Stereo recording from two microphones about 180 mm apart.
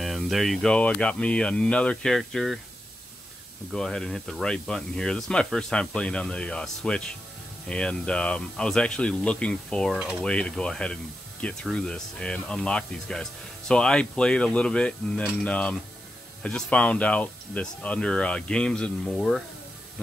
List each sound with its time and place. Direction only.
0.0 s speech: centre (ahead or behind)
3.7 s speech: 5° left (ahead or behind)